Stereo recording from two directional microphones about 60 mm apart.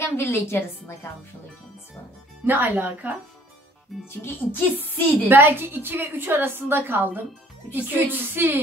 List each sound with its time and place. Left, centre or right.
0.1 s a woman's voice: left
2.4 s speech: right
4.2 s a woman's voice: left
5.3 s a woman's voice: right